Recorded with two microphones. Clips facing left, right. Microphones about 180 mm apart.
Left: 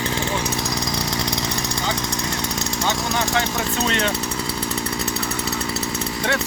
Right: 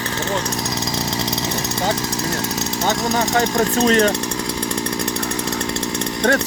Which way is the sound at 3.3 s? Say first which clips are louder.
Right 6 dB; 40° right (ahead or behind).